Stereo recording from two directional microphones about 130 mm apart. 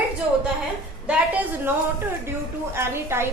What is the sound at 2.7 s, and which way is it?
Speech, 20° right (ahead or behind).